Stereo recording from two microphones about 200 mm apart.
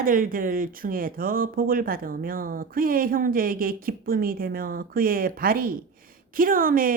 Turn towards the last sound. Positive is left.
turn(degrees=-45)  # may be behind; listen again after turning